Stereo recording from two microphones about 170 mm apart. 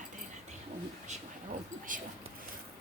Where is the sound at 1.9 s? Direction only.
50° right (ahead or behind).